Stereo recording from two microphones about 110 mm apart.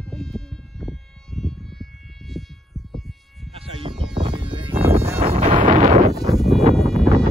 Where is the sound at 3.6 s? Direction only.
55° right (ahead or behind).